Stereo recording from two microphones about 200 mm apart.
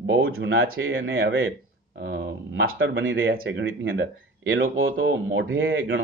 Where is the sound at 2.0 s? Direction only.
60° right (ahead or behind).